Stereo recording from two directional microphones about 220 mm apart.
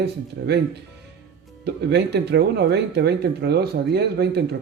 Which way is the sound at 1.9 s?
50° right (ahead or behind).